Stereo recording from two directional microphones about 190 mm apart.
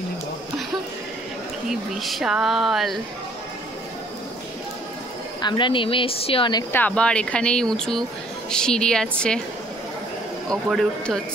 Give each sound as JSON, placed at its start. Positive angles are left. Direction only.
{"t": 1.7, "sound": "speech", "side_deg": 0}
{"t": 5.4, "sound": "speech", "side_deg": 25}
{"t": 6.7, "sound": "speech", "side_deg": 5}
{"t": 10.5, "sound": "speech", "side_deg": 0}